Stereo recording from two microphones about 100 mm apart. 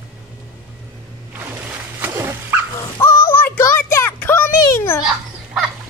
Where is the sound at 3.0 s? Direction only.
25° left (ahead or behind).